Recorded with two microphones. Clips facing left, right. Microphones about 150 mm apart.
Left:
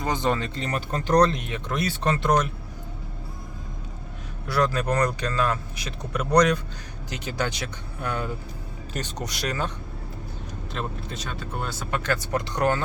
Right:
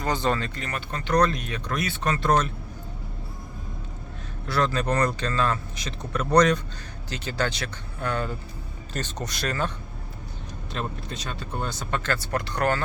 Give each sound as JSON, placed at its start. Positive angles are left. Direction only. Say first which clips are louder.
{"t": 0.0, "sound": "speech", "louder": "even", "side_deg": 20}
{"t": 0.6, "sound": "speech", "louder": "left 4 dB", "side_deg": 40}
{"t": 1.3, "sound": "speech", "louder": "left 1 dB", "side_deg": 20}
{"t": 2.2, "sound": "speech", "louder": "right 1 dB", "side_deg": 15}
{"t": 4.4, "sound": "speech", "louder": "left 1 dB", "side_deg": 10}
{"t": 10.8, "sound": "speech", "louder": "even", "side_deg": 5}